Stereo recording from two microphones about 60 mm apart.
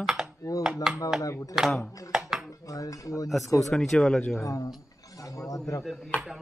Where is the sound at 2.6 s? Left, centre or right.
Left.